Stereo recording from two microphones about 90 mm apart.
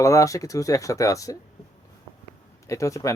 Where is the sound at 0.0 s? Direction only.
35° left (ahead or behind).